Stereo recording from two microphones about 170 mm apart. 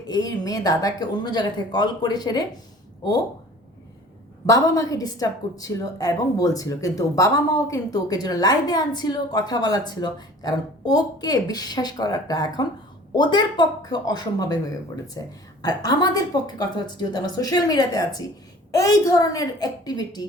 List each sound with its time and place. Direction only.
0.1 s a woman's voice: 20° left (ahead or behind)
4.4 s a woman's voice: 20° left (ahead or behind)